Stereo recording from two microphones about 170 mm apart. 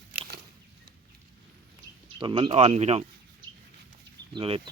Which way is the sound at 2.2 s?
30° right (ahead or behind).